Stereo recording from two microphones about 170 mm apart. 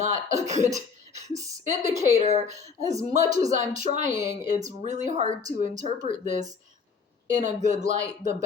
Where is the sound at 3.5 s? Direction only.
45° right (ahead or behind).